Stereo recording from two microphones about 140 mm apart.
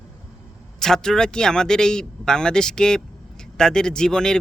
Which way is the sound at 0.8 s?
5° left (ahead or behind).